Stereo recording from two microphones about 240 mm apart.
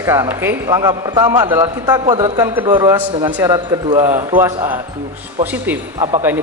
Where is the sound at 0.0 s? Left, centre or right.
Centre.